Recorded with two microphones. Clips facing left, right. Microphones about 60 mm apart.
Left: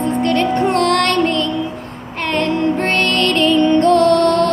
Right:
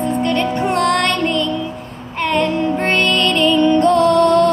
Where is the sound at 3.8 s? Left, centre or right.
Left.